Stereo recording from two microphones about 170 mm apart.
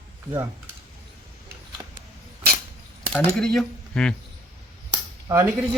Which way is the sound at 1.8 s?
20° right (ahead or behind).